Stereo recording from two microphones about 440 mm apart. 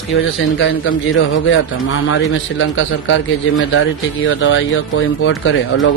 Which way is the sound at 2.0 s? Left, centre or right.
Left.